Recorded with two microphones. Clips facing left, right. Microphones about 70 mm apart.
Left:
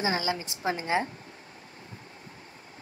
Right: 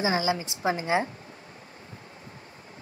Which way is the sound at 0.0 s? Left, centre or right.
Right.